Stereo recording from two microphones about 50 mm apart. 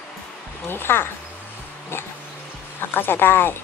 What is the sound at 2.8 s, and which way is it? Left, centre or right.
Speech, left.